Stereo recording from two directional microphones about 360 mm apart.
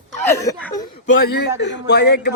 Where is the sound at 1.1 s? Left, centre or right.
Left.